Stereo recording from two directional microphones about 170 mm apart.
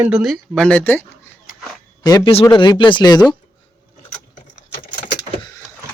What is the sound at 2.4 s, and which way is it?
Speech, 25° left (ahead or behind).